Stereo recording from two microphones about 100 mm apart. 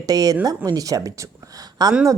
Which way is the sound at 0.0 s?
40° right (ahead or behind).